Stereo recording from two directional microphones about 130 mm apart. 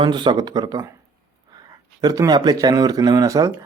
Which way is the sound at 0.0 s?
35° right (ahead or behind).